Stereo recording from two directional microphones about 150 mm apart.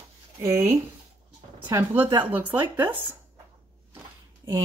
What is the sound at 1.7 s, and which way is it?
Speech, 15° right (ahead or behind).